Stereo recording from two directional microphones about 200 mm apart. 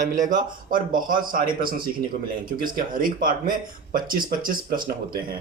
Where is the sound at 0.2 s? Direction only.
40° right (ahead or behind).